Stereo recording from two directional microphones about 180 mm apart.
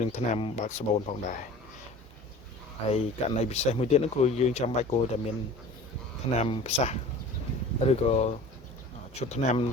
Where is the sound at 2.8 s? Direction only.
35° left (ahead or behind).